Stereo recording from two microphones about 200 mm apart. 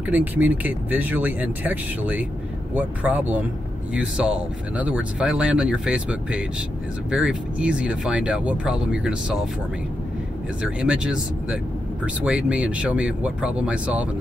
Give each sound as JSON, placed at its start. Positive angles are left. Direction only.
{"t": 0.0, "sound": "speech", "side_deg": -10}
{"t": 10.6, "sound": "speech", "side_deg": -5}